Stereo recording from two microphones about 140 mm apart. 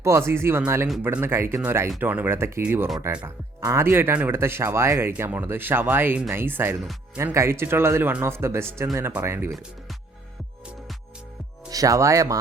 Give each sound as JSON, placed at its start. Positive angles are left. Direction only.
{"t": 0.0, "sound": "speech", "side_deg": -20}
{"t": 11.7, "sound": "speech", "side_deg": -25}